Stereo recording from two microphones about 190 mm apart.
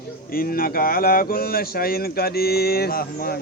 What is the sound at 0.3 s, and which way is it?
Speech, 50° left (ahead or behind).